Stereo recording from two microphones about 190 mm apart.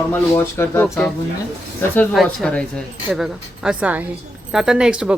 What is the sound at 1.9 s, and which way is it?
Speech, 5° left (ahead or behind).